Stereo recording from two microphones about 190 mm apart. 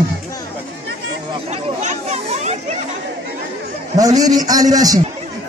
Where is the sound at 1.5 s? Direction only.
40° right (ahead or behind).